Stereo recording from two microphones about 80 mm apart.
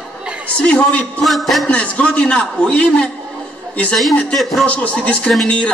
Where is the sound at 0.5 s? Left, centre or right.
Centre.